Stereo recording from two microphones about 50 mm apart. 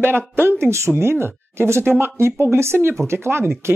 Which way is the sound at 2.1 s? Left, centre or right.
Right.